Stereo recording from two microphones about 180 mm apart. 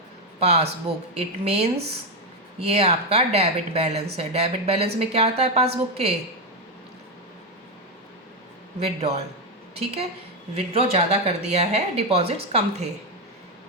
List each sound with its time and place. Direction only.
0.3 s a woman's voice: 35° right (ahead or behind)
8.8 s a woman's voice: 35° right (ahead or behind)